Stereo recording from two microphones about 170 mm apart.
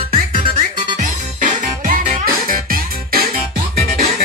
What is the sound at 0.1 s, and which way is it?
Music, 30° right (ahead or behind).